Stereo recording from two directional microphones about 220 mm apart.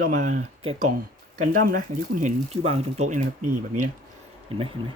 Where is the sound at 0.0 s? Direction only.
35° right (ahead or behind).